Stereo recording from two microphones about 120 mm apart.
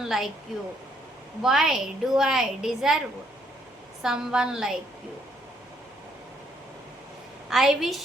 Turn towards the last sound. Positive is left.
turn(degrees=-5)  # may be behind; listen again after turning